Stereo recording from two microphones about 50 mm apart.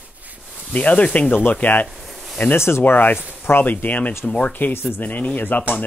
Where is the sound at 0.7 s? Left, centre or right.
Left.